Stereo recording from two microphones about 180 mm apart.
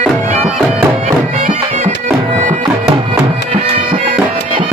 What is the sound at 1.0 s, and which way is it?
Bagpipes, 40° right (ahead or behind).